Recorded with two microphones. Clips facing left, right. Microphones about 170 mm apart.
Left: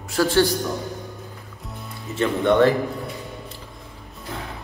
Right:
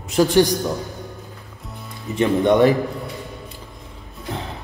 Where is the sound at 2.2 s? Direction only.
15° right (ahead or behind).